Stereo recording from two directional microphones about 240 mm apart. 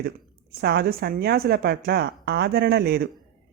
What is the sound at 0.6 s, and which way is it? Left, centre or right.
Speech, right.